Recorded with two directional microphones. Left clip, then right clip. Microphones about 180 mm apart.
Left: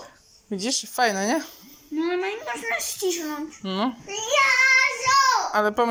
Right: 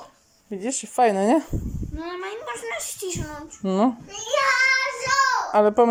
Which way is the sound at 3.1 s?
35° left (ahead or behind).